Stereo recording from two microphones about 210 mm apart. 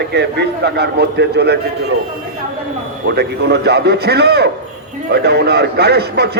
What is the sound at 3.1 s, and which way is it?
A man's voice, 50° right (ahead or behind).